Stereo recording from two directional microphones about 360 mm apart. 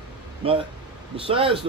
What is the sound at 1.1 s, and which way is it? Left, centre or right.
Speech, centre.